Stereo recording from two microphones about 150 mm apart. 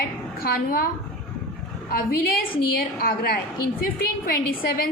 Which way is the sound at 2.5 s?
80° left.